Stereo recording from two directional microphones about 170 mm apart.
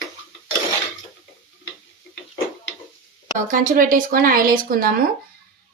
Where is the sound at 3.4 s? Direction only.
50° right (ahead or behind).